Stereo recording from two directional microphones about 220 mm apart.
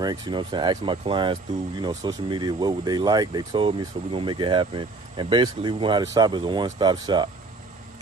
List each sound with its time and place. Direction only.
0.0 s speech: 20° right (ahead or behind)